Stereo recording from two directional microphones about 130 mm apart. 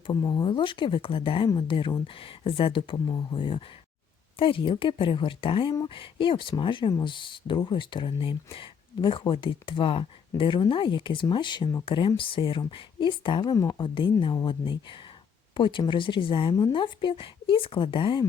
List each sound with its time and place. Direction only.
0.1 s a woman's voice: 30° left (ahead or behind)
13.4 s speech: 25° left (ahead or behind)
13.8 s speech: 40° left (ahead or behind)